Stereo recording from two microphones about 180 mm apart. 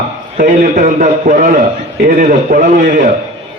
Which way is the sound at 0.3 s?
45° right (ahead or behind).